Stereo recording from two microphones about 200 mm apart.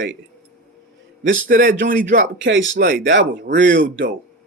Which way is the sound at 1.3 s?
45° right (ahead or behind).